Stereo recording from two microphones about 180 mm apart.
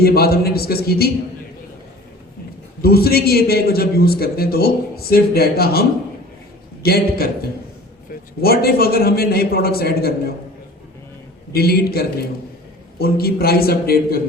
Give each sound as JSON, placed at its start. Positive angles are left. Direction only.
{"t": 0.0, "sound": "a man's voice", "side_deg": 60}
{"t": 2.8, "sound": "a man's voice", "side_deg": 60}
{"t": 6.8, "sound": "a man's voice", "side_deg": 60}
{"t": 8.4, "sound": "a man's voice", "side_deg": 60}
{"t": 11.5, "sound": "a man's voice", "side_deg": 60}